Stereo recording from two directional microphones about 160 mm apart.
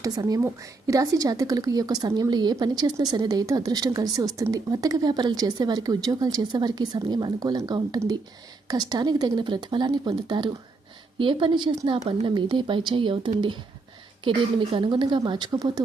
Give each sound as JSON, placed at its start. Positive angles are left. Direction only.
{"t": 0.0, "sound": "a woman's voice", "side_deg": -25}
{"t": 11.9, "sound": "a woman's voice", "side_deg": -40}